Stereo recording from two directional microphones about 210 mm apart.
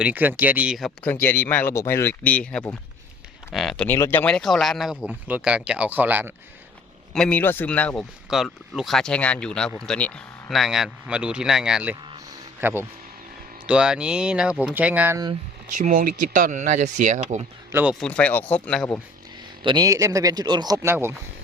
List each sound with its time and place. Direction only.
0.0 s speech: 10° right (ahead or behind)
7.1 s speech: 5° left (ahead or behind); by 15.3 s 10° right (ahead or behind)
15.7 s speech: 40° right (ahead or behind)
17.7 s speech: 10° right (ahead or behind)
18.0 s speech: 5° left (ahead or behind)
19.6 s speech: 20° right (ahead or behind)